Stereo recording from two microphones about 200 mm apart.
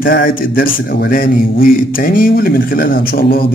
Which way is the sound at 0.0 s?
45° left (ahead or behind).